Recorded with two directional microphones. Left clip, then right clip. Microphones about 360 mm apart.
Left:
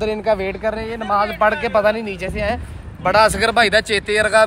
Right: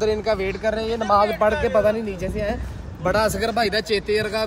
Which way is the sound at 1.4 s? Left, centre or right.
Centre.